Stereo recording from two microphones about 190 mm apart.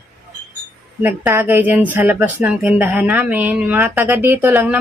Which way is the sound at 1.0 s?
10° right (ahead or behind).